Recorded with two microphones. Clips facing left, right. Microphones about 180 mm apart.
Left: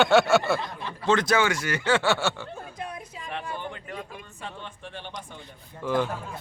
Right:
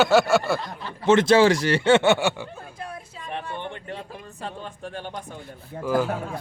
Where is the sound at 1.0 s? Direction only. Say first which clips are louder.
Right 7 dB; 25° right (ahead or behind).